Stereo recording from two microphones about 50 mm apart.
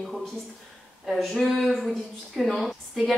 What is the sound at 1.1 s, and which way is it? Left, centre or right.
Speech, centre.